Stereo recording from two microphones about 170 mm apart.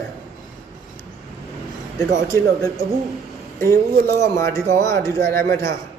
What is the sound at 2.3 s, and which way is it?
Speech, 15° left (ahead or behind).